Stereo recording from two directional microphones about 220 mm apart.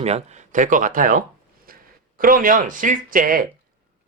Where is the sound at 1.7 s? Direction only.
40° right (ahead or behind).